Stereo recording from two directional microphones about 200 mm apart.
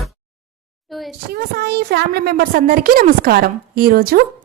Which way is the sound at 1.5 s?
55° right (ahead or behind).